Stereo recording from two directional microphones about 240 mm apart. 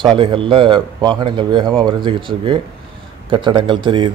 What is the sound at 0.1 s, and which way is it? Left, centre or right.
A man's voice, right.